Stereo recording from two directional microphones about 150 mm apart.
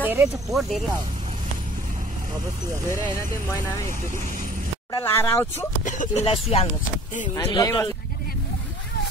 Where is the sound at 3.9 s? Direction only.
60° right (ahead or behind).